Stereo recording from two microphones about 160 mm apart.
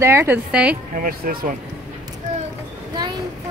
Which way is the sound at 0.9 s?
60° right (ahead or behind).